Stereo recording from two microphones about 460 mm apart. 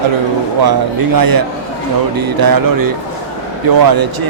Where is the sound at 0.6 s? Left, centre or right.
Right.